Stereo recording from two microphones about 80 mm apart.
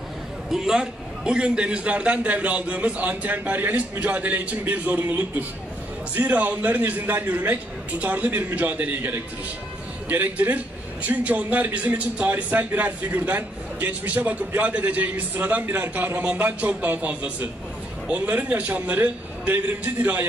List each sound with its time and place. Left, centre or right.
0.5 s a man's voice: centre